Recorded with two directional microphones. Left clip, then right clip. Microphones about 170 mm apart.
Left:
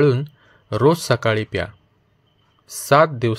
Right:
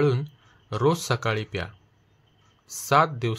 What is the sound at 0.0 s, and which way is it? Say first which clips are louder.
Speech: left 7 dB; 30° left (ahead or behind).